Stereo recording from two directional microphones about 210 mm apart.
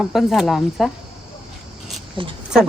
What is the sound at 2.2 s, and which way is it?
Speech, 25° right (ahead or behind).